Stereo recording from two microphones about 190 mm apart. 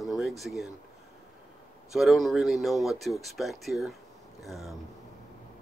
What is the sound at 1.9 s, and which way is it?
Speech, centre (ahead or behind).